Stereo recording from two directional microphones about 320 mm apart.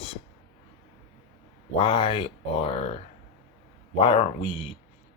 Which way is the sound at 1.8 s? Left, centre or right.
Centre.